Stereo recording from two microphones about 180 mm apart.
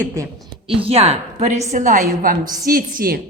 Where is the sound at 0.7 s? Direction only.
30° right (ahead or behind); by 3.2 s 55° right (ahead or behind).